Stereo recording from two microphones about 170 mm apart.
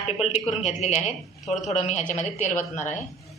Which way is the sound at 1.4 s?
Centre (ahead or behind).